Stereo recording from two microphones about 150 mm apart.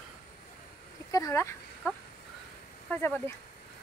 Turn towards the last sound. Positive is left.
turn(degrees=15)  # may be behind; listen again after turning